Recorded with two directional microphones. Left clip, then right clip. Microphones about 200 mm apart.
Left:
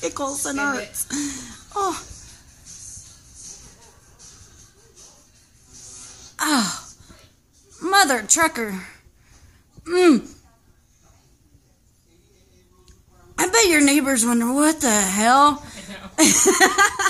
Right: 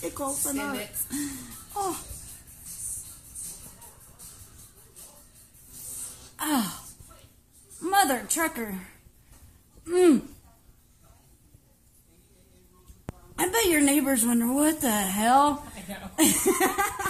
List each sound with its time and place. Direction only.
0.0 s a child's voice: 35° left (ahead or behind)
6.3 s a sound: 20° left (ahead or behind)
7.8 s a woman's voice: 20° left (ahead or behind)
13.4 s a woman's voice: 20° left (ahead or behind)